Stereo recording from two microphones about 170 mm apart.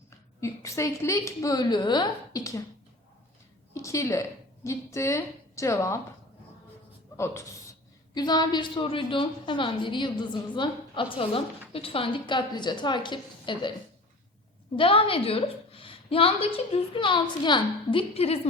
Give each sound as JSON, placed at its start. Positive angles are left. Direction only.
{"t": 0.3, "sound": "a woman's voice", "side_deg": 15}
{"t": 3.8, "sound": "a woman's voice", "side_deg": 15}
{"t": 7.2, "sound": "a woman's voice", "side_deg": 15}
{"t": 14.8, "sound": "a woman's voice", "side_deg": 35}